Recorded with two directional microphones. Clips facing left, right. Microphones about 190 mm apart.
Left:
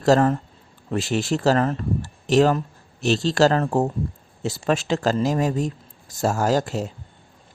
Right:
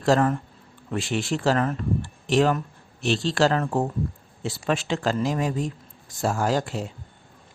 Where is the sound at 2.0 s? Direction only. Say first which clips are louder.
Left 4 dB; 40° left (ahead or behind).